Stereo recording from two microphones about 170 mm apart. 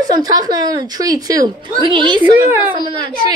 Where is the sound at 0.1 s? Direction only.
20° right (ahead or behind).